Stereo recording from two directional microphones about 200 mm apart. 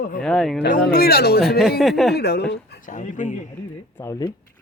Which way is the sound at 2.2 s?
55° left (ahead or behind).